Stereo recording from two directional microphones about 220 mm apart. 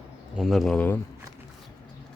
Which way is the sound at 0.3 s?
Centre (ahead or behind).